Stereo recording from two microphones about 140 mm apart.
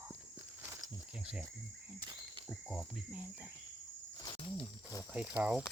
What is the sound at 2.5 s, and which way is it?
Cricket, centre (ahead or behind).